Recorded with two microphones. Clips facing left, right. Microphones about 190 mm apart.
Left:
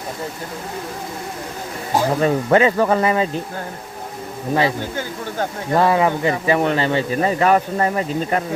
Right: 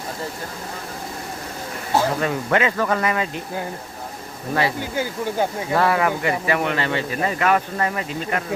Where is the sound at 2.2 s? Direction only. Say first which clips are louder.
Left 6 dB; 35° left (ahead or behind).